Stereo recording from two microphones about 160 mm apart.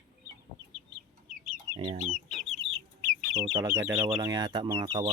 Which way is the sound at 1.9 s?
55° right (ahead or behind).